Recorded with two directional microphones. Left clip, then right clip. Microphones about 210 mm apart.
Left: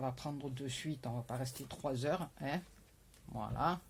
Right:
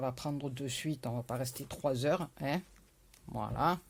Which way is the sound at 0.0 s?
45° right (ahead or behind).